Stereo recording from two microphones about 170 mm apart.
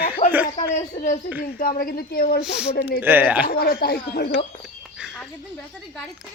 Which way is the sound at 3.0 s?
10° right (ahead or behind).